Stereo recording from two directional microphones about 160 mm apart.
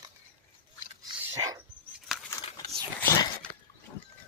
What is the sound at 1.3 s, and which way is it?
Dog, 20° right (ahead or behind).